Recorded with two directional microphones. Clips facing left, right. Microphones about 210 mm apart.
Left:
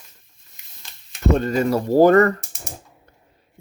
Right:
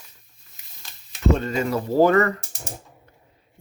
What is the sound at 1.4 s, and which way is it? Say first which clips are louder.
Speech: left 4 dB; 45° left (ahead or behind).